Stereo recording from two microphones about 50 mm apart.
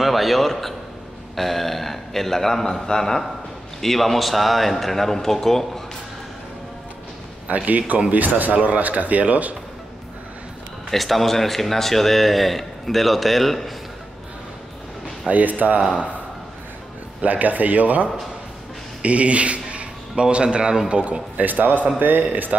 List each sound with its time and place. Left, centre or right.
0.0 s a man's voice: centre
7.4 s a man's voice: right
10.9 s a man's voice: centre
15.2 s a man's voice: right
17.2 s a man's voice: right
19.0 s a man's voice: right